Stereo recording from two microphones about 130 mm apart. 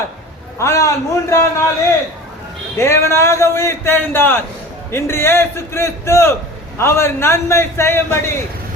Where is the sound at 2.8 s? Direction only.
20° left (ahead or behind).